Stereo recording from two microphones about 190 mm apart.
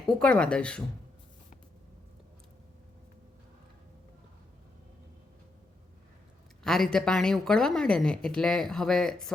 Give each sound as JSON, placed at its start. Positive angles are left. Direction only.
{"t": 0.2, "sound": "a woman's voice", "side_deg": 5}
{"t": 6.6, "sound": "a woman's voice", "side_deg": 0}